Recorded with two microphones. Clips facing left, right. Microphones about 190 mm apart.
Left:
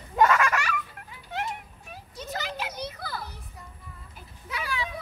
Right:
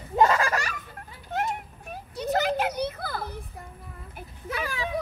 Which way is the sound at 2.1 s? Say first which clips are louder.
Right 10 dB; 60° right (ahead or behind).